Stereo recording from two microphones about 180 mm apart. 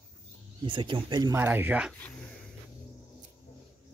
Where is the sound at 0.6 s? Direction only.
30° right (ahead or behind).